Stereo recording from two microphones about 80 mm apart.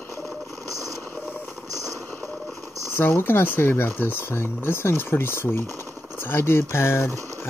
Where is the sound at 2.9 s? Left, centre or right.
Left.